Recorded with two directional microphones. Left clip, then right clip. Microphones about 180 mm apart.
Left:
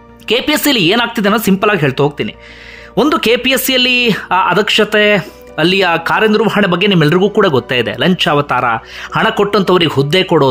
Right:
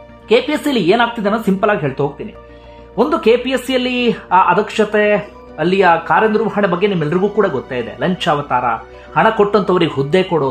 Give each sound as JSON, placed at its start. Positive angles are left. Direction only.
{"t": 0.3, "sound": "speech", "side_deg": 25}